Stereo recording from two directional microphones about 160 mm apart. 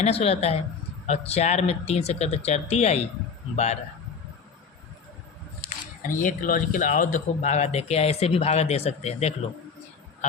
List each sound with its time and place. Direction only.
0.0 s speech: 40° left (ahead or behind)
5.6 s speech: 55° left (ahead or behind)